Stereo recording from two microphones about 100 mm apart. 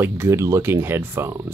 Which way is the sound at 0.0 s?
30° right (ahead or behind).